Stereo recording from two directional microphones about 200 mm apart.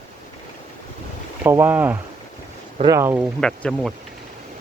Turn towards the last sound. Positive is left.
turn(degrees=0)  # may be behind; listen again after turning